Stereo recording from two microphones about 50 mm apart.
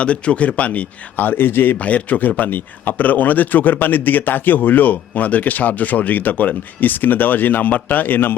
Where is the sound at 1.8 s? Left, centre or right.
Left.